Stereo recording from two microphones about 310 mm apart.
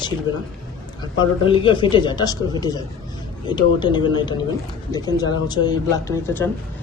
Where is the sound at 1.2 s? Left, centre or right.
Centre.